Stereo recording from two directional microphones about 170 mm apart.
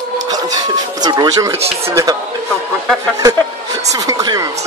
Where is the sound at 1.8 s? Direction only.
20° right (ahead or behind).